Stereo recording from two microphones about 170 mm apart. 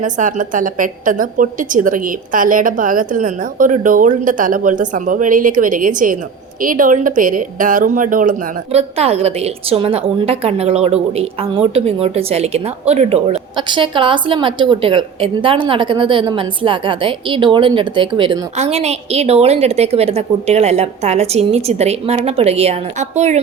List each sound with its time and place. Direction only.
0.0 s a woman's voice: 50° right (ahead or behind); by 18.4 s 25° right (ahead or behind)
18.5 s a woman's voice: 40° right (ahead or behind)